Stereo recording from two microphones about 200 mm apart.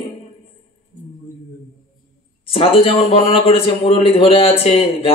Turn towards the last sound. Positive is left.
turn(degrees=30)  # may be behind; listen again after turning